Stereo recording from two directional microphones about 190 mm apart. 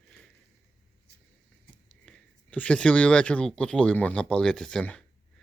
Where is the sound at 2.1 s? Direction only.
5° left (ahead or behind).